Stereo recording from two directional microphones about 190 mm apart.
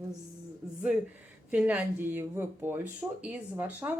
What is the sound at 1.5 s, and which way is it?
Speech, 5° right (ahead or behind).